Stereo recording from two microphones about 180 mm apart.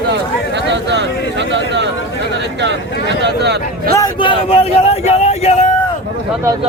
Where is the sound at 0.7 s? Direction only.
75° right (ahead or behind).